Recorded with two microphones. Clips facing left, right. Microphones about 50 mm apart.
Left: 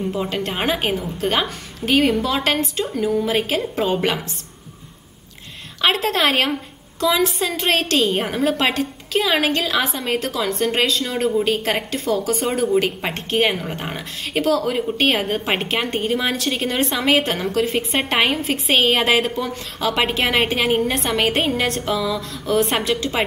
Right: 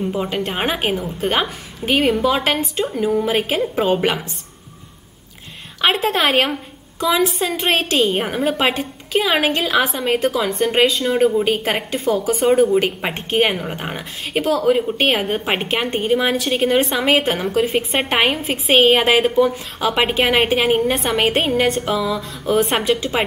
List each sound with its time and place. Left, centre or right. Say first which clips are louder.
0.0 s a woman's voice: right 2 dB; centre
5.8 s a woman's voice: right 1 dB; centre